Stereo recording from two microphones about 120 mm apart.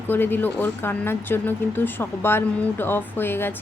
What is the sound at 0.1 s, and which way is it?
Speech, 15° left (ahead or behind).